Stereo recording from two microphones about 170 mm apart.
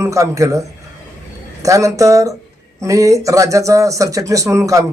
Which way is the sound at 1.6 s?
20° right (ahead or behind).